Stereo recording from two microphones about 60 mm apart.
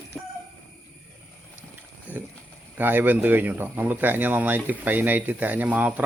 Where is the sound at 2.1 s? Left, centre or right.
Right.